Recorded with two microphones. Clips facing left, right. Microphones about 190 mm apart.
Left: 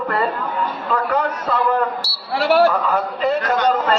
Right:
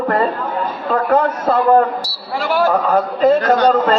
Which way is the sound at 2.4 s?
70° left (ahead or behind).